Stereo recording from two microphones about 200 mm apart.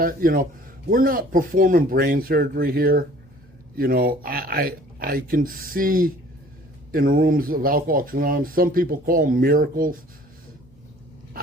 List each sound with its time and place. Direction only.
0.0 s speech: 45° right (ahead or behind)